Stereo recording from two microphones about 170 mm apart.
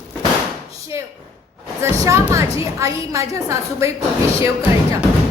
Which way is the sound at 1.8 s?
15° right (ahead or behind).